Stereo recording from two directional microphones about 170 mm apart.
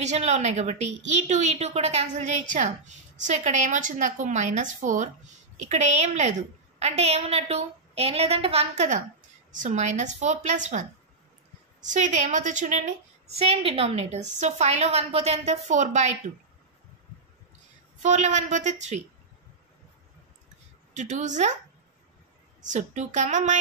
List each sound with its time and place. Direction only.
0.0 s a woman's voice: 40° right (ahead or behind)
13.4 s a woman's voice: 35° right (ahead or behind)
18.0 s a woman's voice: 45° right (ahead or behind)
20.9 s a woman's voice: 45° right (ahead or behind)
22.6 s a woman's voice: 45° right (ahead or behind)